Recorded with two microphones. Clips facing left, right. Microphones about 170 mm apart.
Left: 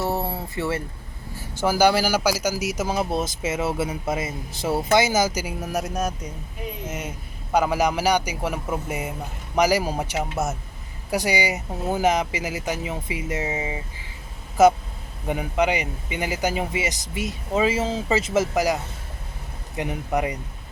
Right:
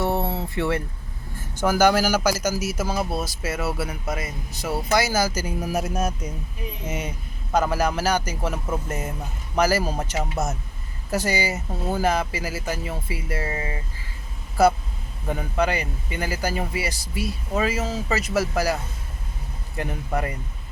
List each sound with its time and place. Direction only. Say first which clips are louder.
0.0 s a sound: right 2 dB; centre (ahead or behind)
1.6 s speech: even; 10° left (ahead or behind)
5.6 s speech: right 1 dB; 5° right (ahead or behind)
7.5 s speech: left 1 dB; 15° left (ahead or behind)